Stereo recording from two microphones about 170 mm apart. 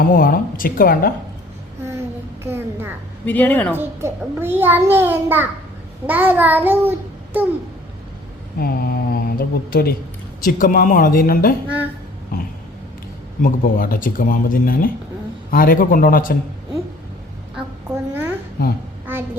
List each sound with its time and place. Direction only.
0.0 s speech: 55° left (ahead or behind)
2.4 s a sound: 15° right (ahead or behind)
3.2 s speech: 10° left (ahead or behind)
3.8 s a child's voice: 15° right (ahead or behind)
8.5 s speech: 65° left (ahead or behind)
10.4 s speech: 55° left (ahead or behind)
13.4 s speech: 55° left (ahead or behind)
17.9 s a sound: 10° right (ahead or behind)
18.6 s a child's voice: 60° left (ahead or behind)